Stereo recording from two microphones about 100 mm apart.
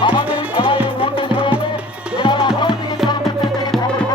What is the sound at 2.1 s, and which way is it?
Music, 55° left (ahead or behind).